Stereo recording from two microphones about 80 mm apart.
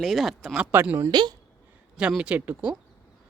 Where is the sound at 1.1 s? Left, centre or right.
Right.